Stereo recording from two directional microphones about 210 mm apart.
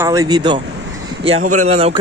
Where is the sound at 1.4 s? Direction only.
35° right (ahead or behind).